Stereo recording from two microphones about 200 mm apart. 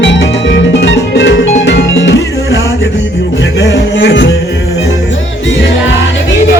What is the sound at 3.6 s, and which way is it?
Music, 60° left (ahead or behind).